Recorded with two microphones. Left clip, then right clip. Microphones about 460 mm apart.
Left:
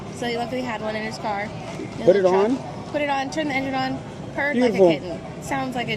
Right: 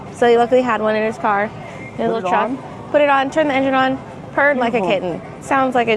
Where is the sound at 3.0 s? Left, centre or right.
Right.